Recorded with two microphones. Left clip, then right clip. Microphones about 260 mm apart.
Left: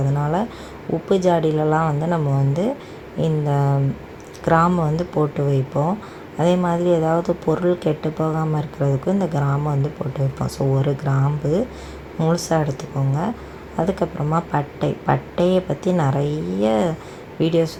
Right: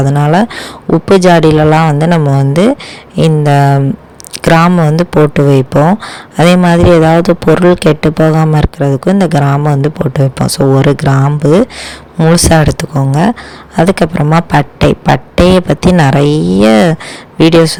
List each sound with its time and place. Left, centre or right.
0.2 s a man's voice: right
1.6 s a man's voice: right